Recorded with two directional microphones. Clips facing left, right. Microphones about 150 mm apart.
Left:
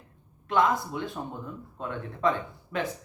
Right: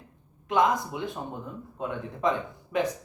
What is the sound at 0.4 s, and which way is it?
Speech, 15° right (ahead or behind).